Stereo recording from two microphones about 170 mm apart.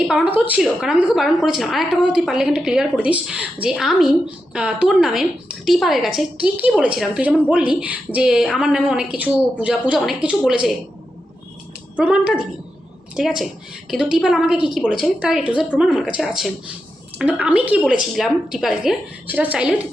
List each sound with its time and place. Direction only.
0.1 s a woman's voice: 10° right (ahead or behind)
11.9 s a woman's voice: 5° right (ahead or behind)